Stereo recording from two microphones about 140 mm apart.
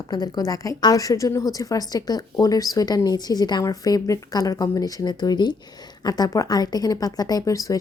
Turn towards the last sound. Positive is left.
turn(degrees=25)  # may be behind; listen again after turning